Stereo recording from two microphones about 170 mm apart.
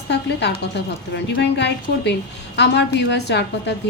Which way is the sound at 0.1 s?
80° left.